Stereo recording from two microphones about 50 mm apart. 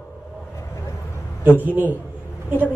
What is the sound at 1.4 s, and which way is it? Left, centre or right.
Speech, right.